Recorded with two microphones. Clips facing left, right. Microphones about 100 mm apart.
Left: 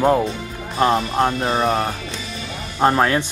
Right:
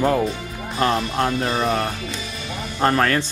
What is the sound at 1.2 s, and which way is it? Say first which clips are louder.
Speech: left 2 dB; 30° left (ahead or behind).